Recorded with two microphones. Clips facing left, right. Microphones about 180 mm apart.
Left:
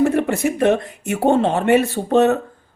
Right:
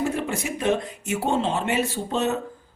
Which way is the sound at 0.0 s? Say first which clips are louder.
Left 9 dB; 60° left (ahead or behind).